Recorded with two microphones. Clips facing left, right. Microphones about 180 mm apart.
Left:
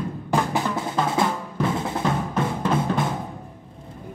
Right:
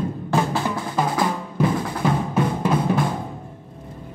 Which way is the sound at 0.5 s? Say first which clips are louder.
Right 1 dB; 20° left (ahead or behind).